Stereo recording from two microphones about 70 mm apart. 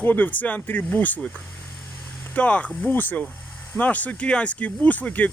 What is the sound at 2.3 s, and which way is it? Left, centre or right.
Speech, centre.